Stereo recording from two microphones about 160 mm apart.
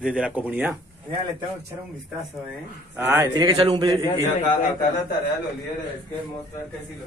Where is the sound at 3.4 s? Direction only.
25° right (ahead or behind).